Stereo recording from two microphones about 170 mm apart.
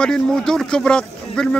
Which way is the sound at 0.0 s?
5° left (ahead or behind).